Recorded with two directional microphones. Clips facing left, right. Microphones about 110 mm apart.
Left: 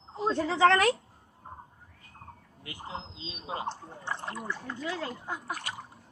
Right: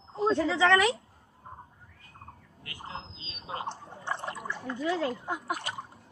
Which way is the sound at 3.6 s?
20° right (ahead or behind).